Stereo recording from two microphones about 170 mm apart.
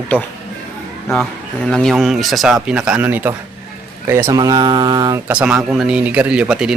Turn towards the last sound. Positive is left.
turn(degrees=-5)  # may be behind; listen again after turning